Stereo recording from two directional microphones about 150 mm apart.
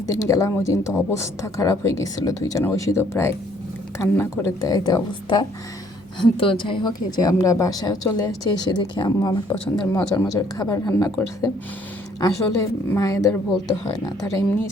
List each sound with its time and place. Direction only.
0.1 s speech: 20° left (ahead or behind)